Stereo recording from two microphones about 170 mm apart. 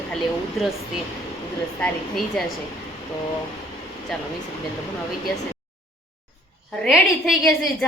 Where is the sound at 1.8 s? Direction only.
5° left (ahead or behind).